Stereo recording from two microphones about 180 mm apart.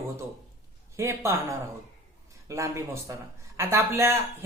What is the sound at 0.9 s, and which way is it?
Speech, 15° right (ahead or behind).